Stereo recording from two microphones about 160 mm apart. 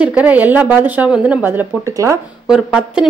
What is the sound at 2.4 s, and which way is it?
Speech, 5° right (ahead or behind).